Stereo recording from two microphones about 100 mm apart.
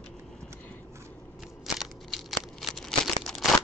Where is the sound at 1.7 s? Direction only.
Centre (ahead or behind).